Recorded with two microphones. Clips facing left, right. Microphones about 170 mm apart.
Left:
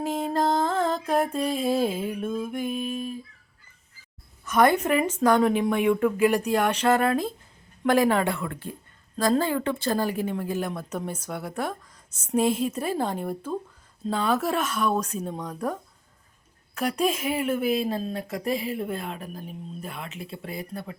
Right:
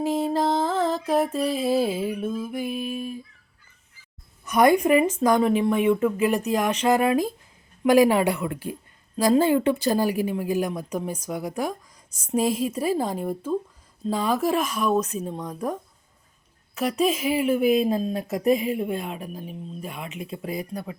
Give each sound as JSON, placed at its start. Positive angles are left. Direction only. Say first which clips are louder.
{"t": 0.0, "sound": "mantra", "louder": "right 2 dB", "side_deg": -5}
{"t": 4.4, "sound": "speech", "louder": "right 3 dB", "side_deg": -15}
{"t": 16.7, "sound": "speech", "louder": "right 2 dB", "side_deg": -5}
{"t": 17.7, "sound": "speech", "louder": "right 5 dB", "side_deg": -20}
{"t": 18.8, "sound": "speech", "louder": "right 3 dB", "side_deg": -10}